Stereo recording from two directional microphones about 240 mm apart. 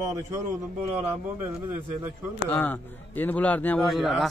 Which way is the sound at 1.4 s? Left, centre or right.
Centre.